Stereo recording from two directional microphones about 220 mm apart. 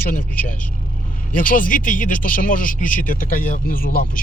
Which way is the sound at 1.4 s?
40° left (ahead or behind).